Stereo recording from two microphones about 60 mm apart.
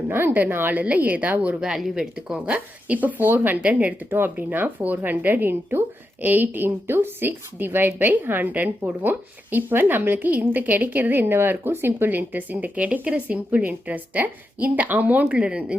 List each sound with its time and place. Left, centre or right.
0.1 s speech: right
1.6 s a woman's voice: centre